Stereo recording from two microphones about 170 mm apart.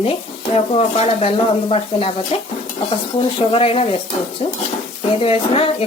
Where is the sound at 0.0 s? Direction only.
35° left (ahead or behind).